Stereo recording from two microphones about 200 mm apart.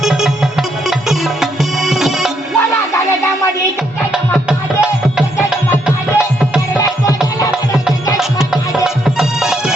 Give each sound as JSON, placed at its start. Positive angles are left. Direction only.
{"t": 0.0, "sound": "music", "side_deg": 0}
{"t": 4.4, "sound": "music", "side_deg": -5}
{"t": 8.2, "sound": "music", "side_deg": 0}